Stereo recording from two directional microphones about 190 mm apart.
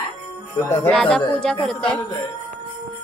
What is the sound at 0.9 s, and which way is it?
A woman's voice, centre (ahead or behind).